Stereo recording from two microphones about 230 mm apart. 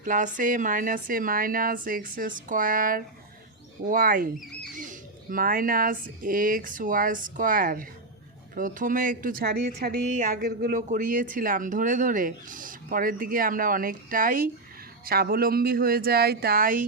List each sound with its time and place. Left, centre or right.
0.0 s a woman's voice: right